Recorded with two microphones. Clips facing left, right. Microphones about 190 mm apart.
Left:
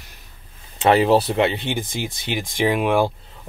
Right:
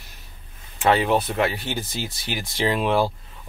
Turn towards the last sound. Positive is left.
turn(degrees=15)  # may be behind; listen again after turning